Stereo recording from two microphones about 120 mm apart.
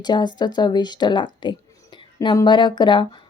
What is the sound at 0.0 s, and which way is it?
Speech, 40° left (ahead or behind).